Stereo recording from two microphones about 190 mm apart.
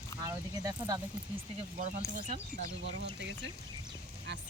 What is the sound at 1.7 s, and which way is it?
Speech, 40° right (ahead or behind).